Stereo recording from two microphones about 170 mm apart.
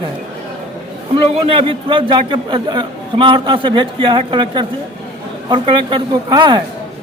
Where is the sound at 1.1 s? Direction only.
30° right (ahead or behind).